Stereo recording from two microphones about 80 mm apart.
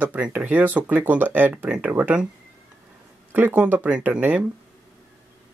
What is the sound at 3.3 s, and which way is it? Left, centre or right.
Speech, centre.